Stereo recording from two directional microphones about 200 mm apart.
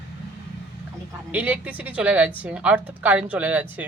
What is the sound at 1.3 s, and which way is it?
Speech, 10° right (ahead or behind).